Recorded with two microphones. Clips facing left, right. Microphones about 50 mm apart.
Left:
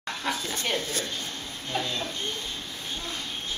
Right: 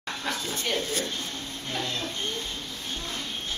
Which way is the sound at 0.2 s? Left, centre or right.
Centre.